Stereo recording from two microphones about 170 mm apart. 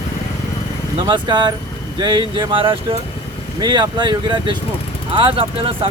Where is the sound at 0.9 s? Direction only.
25° right (ahead or behind).